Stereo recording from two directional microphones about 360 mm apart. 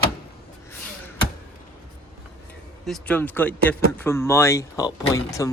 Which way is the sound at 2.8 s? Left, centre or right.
Centre.